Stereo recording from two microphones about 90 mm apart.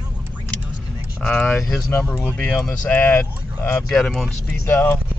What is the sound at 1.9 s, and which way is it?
Speech, 20° left (ahead or behind).